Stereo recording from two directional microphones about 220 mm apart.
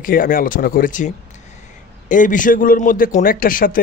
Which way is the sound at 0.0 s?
40° left (ahead or behind).